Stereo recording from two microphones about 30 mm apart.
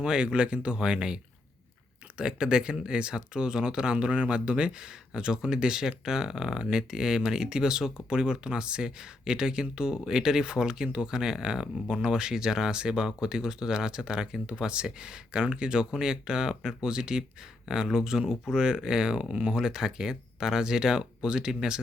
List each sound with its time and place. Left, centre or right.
0.0 s speech: right
0.8 s speech: right
4.0 s speech: right